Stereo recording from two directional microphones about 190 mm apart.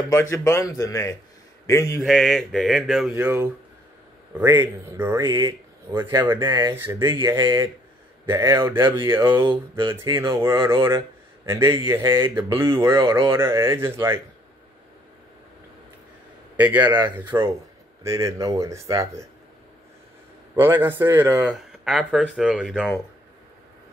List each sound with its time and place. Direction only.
0.1 s speech: 15° left (ahead or behind)
2.0 s a man's voice: centre (ahead or behind)
5.2 s speech: 25° right (ahead or behind)
5.9 s speech: 15° right (ahead or behind)
7.2 s speech: 25° right (ahead or behind)
9.4 s speech: 25° right (ahead or behind)
16.5 s a man's voice: 10° right (ahead or behind)
20.5 s speech: 10° right (ahead or behind)